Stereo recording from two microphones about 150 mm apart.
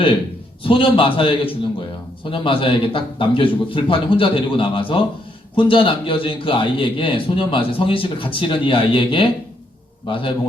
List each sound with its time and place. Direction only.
0.6 s a man's voice: 35° left (ahead or behind)